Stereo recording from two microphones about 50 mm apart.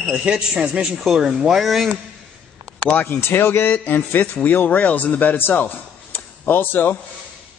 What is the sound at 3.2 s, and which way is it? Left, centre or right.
A man's voice, left.